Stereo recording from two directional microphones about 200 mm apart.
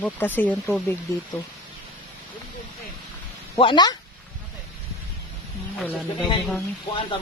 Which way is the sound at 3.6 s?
25° left (ahead or behind).